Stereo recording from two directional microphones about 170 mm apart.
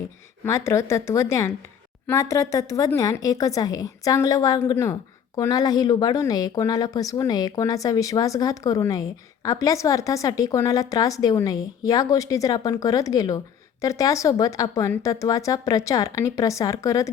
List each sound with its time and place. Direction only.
0.4 s speech: 15° left (ahead or behind)